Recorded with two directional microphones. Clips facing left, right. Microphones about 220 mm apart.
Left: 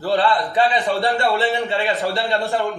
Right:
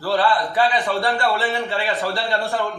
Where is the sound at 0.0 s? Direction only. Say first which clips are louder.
Left 1 dB; 15° left (ahead or behind).